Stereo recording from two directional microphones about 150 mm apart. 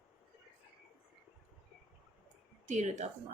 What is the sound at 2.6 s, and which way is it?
Speech, 55° right (ahead or behind).